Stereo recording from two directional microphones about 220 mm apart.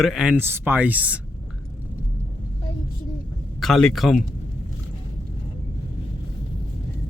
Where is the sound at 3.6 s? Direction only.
Centre (ahead or behind).